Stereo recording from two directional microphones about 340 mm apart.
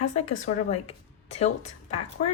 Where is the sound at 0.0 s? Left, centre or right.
Left.